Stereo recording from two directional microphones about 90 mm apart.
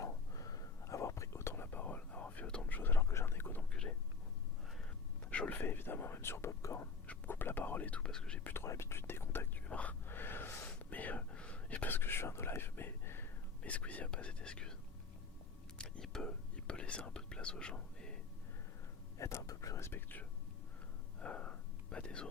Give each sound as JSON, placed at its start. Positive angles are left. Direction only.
{"t": 0.0, "sound": "whispering", "side_deg": 40}
{"t": 3.7, "sound": "a sound", "side_deg": 10}
{"t": 5.3, "sound": "whispering", "side_deg": 15}
{"t": 7.1, "sound": "whispering", "side_deg": 25}
{"t": 8.4, "sound": "whispering", "side_deg": 30}
{"t": 9.6, "sound": "whispering", "side_deg": 15}
{"t": 15.8, "sound": "whispering", "side_deg": 10}
{"t": 19.2, "sound": "whispering", "side_deg": 35}
{"t": 21.2, "sound": "whispering", "side_deg": 10}